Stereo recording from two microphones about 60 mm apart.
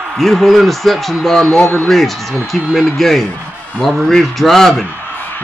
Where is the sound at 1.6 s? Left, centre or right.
Left.